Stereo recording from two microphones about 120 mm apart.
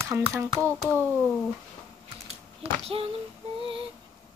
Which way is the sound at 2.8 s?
50° right (ahead or behind).